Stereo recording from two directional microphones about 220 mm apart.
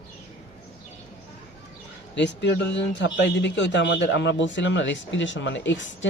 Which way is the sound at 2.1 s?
55° left (ahead or behind).